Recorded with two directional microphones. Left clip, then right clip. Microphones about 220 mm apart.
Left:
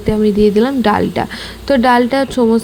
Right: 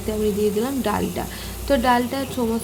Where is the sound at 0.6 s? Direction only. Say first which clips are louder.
Left 10 dB; 35° left (ahead or behind).